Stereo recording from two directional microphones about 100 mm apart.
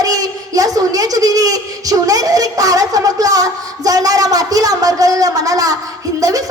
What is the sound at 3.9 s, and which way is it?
Speech, 35° right (ahead or behind).